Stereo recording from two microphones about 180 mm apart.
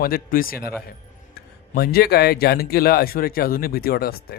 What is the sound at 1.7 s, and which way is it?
Speech, 60° left (ahead or behind).